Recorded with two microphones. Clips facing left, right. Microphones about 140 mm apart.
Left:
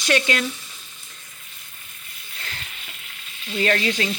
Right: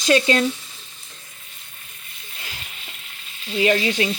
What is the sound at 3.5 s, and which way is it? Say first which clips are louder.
Frying: right 3 dB; 15° right (ahead or behind).